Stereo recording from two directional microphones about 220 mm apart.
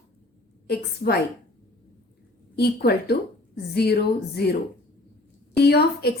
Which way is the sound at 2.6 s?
45° left (ahead or behind).